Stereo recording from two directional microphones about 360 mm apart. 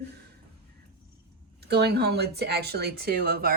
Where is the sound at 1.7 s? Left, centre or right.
Right.